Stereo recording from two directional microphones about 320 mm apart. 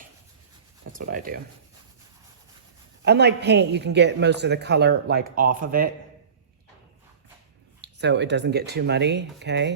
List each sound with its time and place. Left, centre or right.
0.9 s speech: right
3.0 s a man's voice: right
7.8 s a man's voice: right